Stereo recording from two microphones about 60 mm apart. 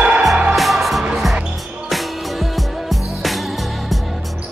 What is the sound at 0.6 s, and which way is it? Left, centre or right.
Music, centre.